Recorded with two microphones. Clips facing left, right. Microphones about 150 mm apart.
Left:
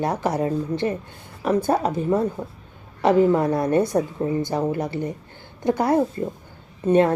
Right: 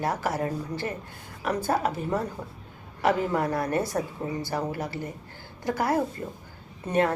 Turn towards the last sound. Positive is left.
turn(degrees=25)  # may be behind; listen again after turning